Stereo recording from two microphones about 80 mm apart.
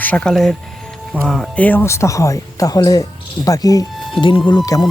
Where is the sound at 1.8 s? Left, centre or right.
Left.